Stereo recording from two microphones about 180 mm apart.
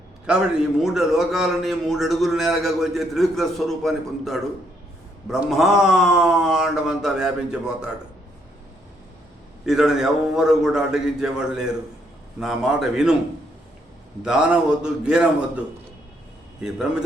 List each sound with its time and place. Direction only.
0.3 s a man's voice: 5° right (ahead or behind)
9.6 s a man's voice: centre (ahead or behind)
14.2 s a man's voice: 5° right (ahead or behind)
16.6 s a man's voice: 5° right (ahead or behind)